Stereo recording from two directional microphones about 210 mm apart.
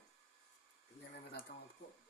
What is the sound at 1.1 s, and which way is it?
Speech, 50° left (ahead or behind).